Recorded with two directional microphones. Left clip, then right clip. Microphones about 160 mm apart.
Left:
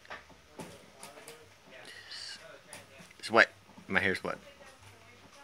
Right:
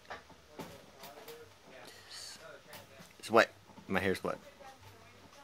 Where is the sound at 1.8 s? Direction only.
15° right (ahead or behind).